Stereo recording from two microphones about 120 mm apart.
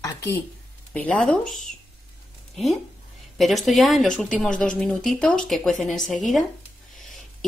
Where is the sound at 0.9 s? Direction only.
10° left (ahead or behind).